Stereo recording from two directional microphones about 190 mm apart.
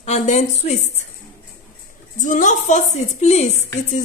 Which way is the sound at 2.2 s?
40° left (ahead or behind).